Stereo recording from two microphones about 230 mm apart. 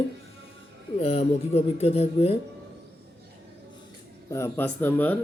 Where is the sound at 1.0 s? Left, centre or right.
Left.